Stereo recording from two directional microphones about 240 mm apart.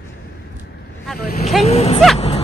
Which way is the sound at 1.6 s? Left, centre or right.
Left.